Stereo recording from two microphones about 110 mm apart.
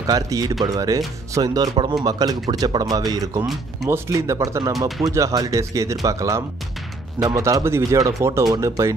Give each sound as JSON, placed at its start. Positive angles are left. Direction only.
{"t": 0.0, "sound": "speech", "side_deg": -35}
{"t": 4.7, "sound": "speech", "side_deg": 0}
{"t": 5.1, "sound": "speech", "side_deg": -30}